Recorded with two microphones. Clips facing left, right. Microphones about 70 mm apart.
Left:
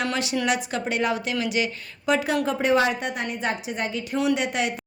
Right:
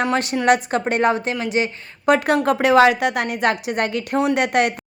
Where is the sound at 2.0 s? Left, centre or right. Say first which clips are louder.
Right 6 dB; right.